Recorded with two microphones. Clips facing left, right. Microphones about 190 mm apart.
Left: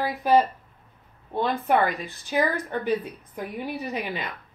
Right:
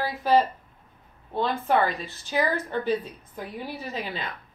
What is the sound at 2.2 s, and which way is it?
Speech, 15° left (ahead or behind).